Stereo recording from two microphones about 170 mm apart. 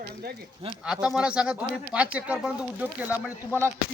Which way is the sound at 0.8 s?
5° right (ahead or behind).